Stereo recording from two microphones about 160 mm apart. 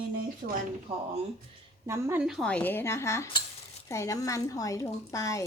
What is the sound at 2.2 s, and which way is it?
A woman's voice, centre (ahead or behind).